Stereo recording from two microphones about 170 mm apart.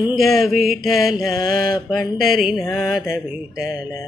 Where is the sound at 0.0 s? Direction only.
Centre (ahead or behind).